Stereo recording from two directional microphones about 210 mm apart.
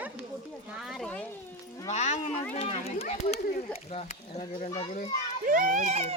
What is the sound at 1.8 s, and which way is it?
A child's voice, 35° left (ahead or behind).